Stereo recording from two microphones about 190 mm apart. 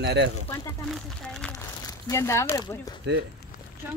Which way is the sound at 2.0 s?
15° left (ahead or behind).